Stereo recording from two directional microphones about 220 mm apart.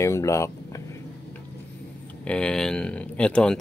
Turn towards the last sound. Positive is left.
turn(degrees=5)  # may be behind; listen again after turning